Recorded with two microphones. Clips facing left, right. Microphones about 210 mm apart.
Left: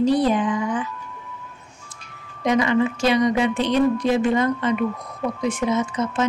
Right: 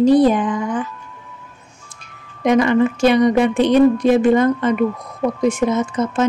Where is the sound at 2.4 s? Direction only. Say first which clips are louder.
Right 5 dB; 55° right (ahead or behind).